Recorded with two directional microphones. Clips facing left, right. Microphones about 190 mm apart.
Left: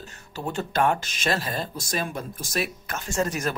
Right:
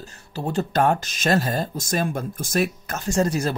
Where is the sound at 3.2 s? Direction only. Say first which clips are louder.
Right 4 dB; 30° right (ahead or behind).